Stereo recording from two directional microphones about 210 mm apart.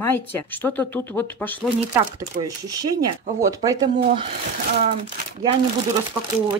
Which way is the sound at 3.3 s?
15° right (ahead or behind).